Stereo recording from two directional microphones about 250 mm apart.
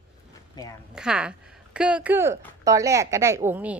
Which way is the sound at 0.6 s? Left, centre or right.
Centre.